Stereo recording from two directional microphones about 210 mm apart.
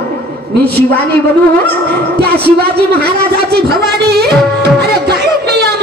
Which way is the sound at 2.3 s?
50° right (ahead or behind).